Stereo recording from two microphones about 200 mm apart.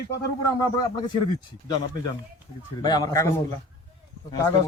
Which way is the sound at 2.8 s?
20° left (ahead or behind).